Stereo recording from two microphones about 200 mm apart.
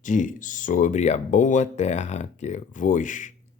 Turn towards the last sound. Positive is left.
turn(degrees=40)  # may be behind; listen again after turning